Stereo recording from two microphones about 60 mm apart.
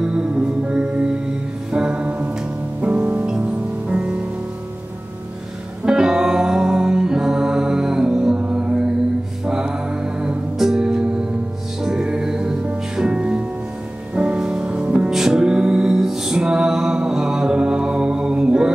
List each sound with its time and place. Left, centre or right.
0.0 s music: centre
5.9 s music: centre